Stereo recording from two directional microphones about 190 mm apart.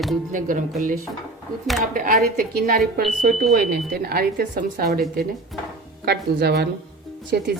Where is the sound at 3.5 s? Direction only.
55° right (ahead or behind).